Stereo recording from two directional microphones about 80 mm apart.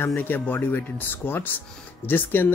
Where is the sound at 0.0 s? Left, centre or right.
Left.